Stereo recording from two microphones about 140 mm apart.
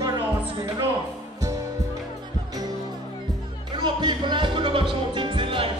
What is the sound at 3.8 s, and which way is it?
Music, 30° right (ahead or behind).